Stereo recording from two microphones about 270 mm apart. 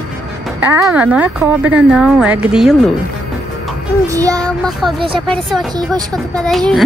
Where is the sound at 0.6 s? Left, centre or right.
Centre.